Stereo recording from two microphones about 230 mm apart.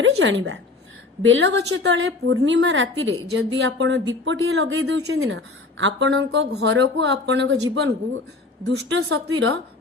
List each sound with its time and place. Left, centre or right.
0.0 s a woman's voice: right